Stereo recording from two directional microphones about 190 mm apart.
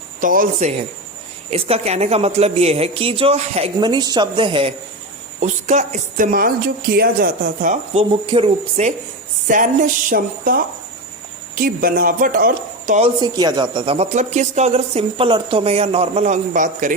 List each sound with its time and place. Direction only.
0.2 s a woman's voice: 45° right (ahead or behind); by 4.7 s 30° right (ahead or behind)
5.4 s a woman's voice: 40° right (ahead or behind)
7.9 s a woman's voice: 30° right (ahead or behind)
9.5 s speech: 45° right (ahead or behind)
13.1 s a woman's voice: 20° right (ahead or behind); by 16.9 s 40° right (ahead or behind)